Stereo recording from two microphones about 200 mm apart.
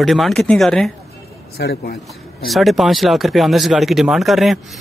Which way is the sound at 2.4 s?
Centre (ahead or behind).